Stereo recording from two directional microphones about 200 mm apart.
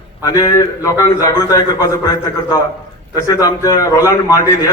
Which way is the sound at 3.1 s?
15° left (ahead or behind).